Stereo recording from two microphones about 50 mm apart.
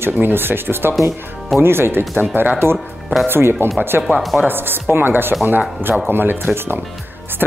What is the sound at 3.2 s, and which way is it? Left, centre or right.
Speech, right.